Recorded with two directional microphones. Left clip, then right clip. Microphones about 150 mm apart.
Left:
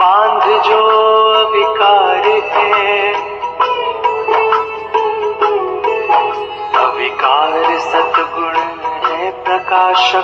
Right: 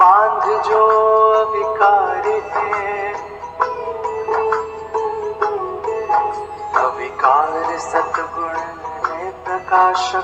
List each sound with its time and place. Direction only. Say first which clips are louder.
0.0 s music: left 2 dB; 30° left (ahead or behind)